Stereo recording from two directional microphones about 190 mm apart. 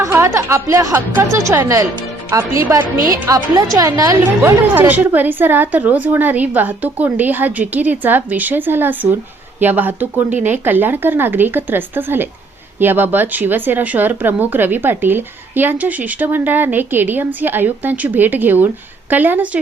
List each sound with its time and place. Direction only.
0.0 s speech: 15° right (ahead or behind)